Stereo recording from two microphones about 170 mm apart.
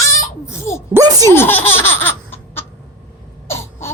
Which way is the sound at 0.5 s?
15° left (ahead or behind).